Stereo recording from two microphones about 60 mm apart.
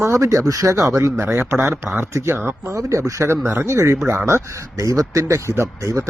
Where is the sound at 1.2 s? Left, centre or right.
Right.